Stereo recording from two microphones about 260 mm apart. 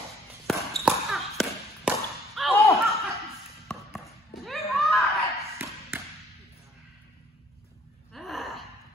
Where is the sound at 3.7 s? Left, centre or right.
Centre.